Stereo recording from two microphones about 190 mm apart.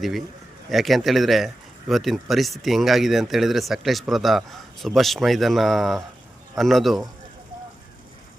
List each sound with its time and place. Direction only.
0.7 s speech: centre (ahead or behind)